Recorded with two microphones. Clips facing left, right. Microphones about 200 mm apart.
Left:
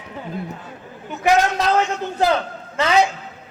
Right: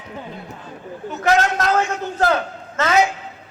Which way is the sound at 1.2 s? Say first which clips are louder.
Left 1 dB; 15° left (ahead or behind).